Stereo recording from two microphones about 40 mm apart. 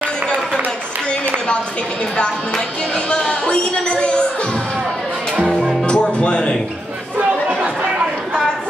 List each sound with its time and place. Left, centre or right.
3.1 s a woman's voice: left
5.6 s music: centre
5.9 s speech: left